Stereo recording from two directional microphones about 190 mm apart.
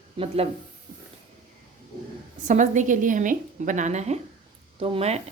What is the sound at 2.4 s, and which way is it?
A woman's voice, 40° right (ahead or behind).